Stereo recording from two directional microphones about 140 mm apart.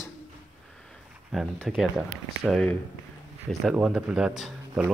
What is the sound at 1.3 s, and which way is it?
Speech, centre (ahead or behind).